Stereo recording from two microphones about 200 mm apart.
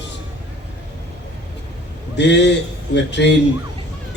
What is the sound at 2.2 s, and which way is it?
A man's voice, 60° left (ahead or behind).